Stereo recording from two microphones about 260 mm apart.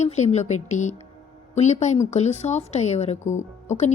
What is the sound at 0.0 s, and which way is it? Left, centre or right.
Speech, left.